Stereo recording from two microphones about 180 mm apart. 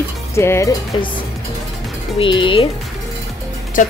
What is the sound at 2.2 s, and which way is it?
Speech, 30° left (ahead or behind).